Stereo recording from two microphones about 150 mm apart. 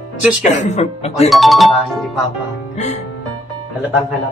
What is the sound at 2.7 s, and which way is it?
Music, 50° left (ahead or behind).